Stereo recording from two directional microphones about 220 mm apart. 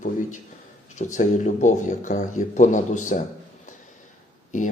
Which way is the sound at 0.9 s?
35° left (ahead or behind).